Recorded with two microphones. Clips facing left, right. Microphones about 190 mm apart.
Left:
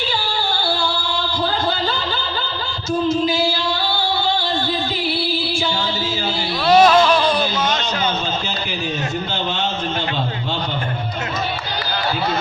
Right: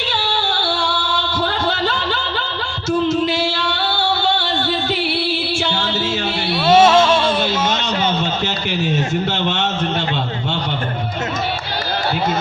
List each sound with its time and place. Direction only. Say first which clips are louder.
0.1 s music: right 1 dB; 70° right (ahead or behind)
3.1 s singing: even; 75° right (ahead or behind)
5.0 s music: right 1 dB; 70° right (ahead or behind)
6.7 s a sound: right 1 dB; 25° right (ahead or behind)